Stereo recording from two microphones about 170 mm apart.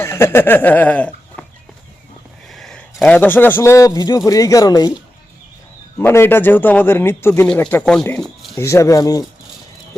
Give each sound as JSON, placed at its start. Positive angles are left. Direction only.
{"t": 0.0, "sound": "speech", "side_deg": 15}
{"t": 2.5, "sound": "a man's voice", "side_deg": 0}
{"t": 6.0, "sound": "speech", "side_deg": 15}
{"t": 8.5, "sound": "speech", "side_deg": 15}